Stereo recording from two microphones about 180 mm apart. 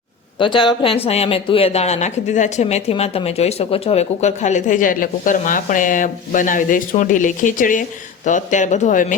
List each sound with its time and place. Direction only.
0.3 s speech: 25° left (ahead or behind); by 9.1 s 45° left (ahead or behind)